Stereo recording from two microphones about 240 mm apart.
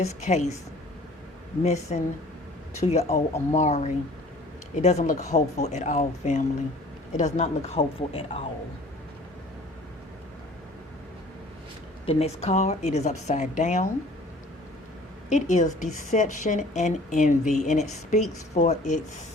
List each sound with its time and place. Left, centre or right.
0.0 s a woman's voice: left
1.6 s a woman's voice: left
12.0 s a woman's voice: left
15.3 s a woman's voice: left